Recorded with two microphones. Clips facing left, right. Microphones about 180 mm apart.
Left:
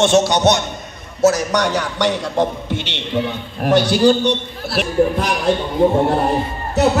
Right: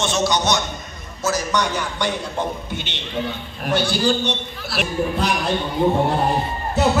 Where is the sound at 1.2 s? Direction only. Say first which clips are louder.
Left 7 dB; 80° left.